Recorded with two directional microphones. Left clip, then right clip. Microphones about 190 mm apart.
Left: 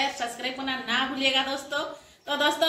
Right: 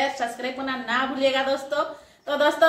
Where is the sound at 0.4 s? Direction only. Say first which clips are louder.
Right 2 dB; 10° right (ahead or behind).